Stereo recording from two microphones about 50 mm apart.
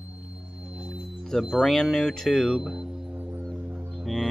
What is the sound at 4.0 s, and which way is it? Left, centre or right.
Music, centre.